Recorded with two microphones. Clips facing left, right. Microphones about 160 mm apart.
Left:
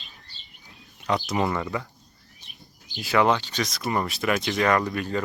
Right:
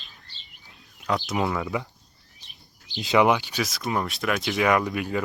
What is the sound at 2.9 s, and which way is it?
Speech, 20° right (ahead or behind).